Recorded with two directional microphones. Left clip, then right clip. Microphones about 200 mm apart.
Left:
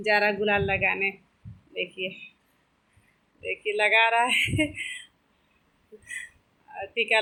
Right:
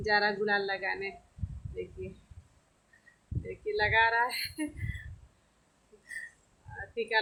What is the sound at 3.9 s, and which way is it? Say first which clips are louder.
Speech: left 4 dB; 5° left (ahead or behind).